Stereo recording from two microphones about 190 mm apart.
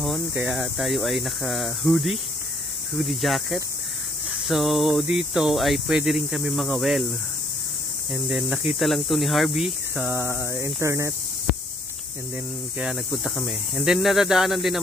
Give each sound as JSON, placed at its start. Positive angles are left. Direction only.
{"t": 0.0, "sound": "speech", "side_deg": -5}
{"t": 8.1, "sound": "speech", "side_deg": 0}
{"t": 12.7, "sound": "speech", "side_deg": 0}